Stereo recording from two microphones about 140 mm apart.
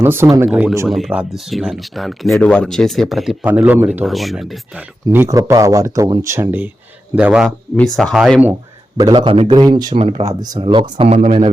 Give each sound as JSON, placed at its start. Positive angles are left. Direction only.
{"t": 0.0, "sound": "speech", "side_deg": -15}
{"t": 0.9, "sound": "speech", "side_deg": 0}
{"t": 3.4, "sound": "speech", "side_deg": -10}
{"t": 4.0, "sound": "speech", "side_deg": 0}
{"t": 5.1, "sound": "a man's voice", "side_deg": -20}
{"t": 7.4, "sound": "speech", "side_deg": 0}
{"t": 9.0, "sound": "a man's voice", "side_deg": -25}
{"t": 9.2, "sound": "speech", "side_deg": -40}
{"t": 9.6, "sound": "a man's voice", "side_deg": -30}
{"t": 10.0, "sound": "speech", "side_deg": -40}
{"t": 10.2, "sound": "speech", "side_deg": -30}